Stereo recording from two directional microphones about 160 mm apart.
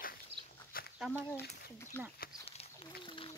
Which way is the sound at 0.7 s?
65° left (ahead or behind).